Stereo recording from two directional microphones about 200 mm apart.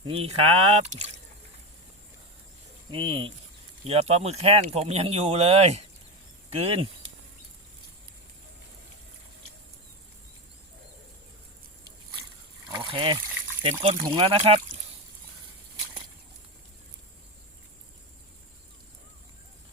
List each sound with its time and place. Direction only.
0.0 s speech: 25° right (ahead or behind)
2.9 s speech: 25° right (ahead or behind)
12.7 s trickle: 25° right (ahead or behind)
13.6 s speech: 25° right (ahead or behind)